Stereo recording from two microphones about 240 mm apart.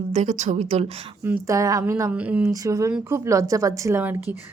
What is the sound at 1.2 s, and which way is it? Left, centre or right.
A woman's voice, centre.